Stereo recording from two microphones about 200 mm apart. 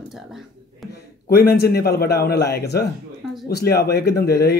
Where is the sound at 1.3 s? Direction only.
50° left (ahead or behind).